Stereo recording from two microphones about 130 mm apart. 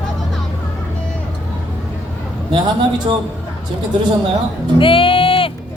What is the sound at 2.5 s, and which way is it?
Speech, 35° right (ahead or behind).